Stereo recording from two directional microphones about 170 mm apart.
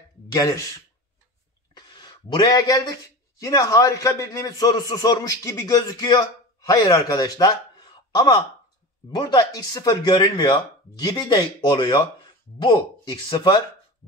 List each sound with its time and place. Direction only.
0.3 s speech: 20° left (ahead or behind)
1.7 s speech: 25° left (ahead or behind)